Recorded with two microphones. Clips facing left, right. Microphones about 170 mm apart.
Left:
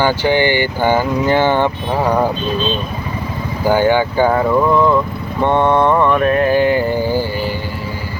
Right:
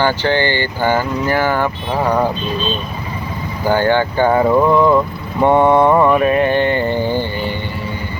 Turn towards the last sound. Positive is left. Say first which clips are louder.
# left 1 dB
turn(degrees=5)  # may be behind; listen again after turning